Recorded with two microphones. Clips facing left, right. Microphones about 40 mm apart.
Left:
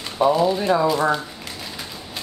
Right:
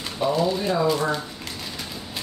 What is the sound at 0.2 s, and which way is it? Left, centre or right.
Speech, centre.